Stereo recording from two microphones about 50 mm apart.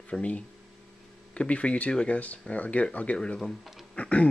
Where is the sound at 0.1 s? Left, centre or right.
Left.